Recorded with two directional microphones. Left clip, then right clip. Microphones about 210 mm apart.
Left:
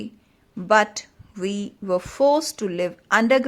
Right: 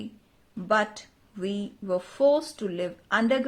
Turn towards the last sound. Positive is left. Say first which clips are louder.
# left 7 dB
turn(degrees=30)  # may be behind; listen again after turning